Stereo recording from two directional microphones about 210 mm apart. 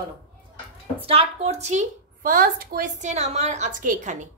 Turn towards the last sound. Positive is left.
turn(degrees=-35)  # may be behind; listen again after turning